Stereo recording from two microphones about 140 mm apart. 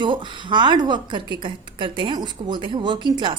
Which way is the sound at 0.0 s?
35° right (ahead or behind).